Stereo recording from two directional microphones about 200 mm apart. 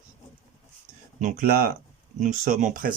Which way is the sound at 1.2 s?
40° right (ahead or behind).